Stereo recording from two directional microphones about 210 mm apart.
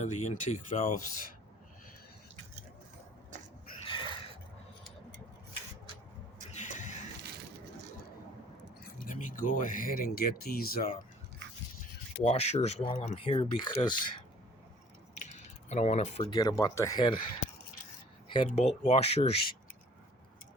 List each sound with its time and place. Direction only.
0.0 s speech: 35° left (ahead or behind)
3.8 s a sound: 25° left (ahead or behind)
6.5 s a sound: 35° left (ahead or behind)
8.8 s speech: 40° left (ahead or behind)
12.2 s speech: 30° left (ahead or behind)
15.7 s speech: 35° left (ahead or behind)
16.3 s speech: 15° left (ahead or behind)
18.4 s speech: 30° left (ahead or behind)